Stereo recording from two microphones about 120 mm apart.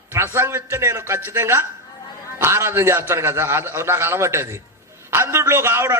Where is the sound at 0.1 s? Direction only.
20° right (ahead or behind).